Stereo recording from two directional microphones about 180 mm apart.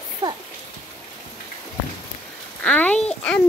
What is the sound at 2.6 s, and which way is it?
Speech, 5° left (ahead or behind).